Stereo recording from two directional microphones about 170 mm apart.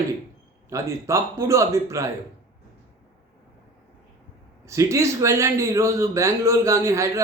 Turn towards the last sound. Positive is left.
turn(degrees=-20)  # may be behind; listen again after turning